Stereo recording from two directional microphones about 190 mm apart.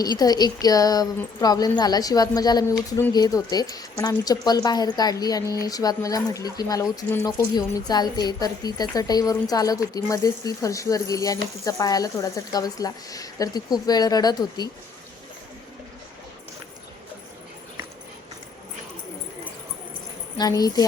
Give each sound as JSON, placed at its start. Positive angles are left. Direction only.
{"t": 0.0, "sound": "a woman's voice", "side_deg": 20}
{"t": 20.4, "sound": "a woman's voice", "side_deg": 20}